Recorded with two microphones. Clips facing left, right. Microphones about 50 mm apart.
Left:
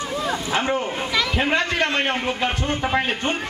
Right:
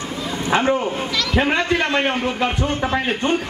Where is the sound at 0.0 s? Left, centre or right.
Left.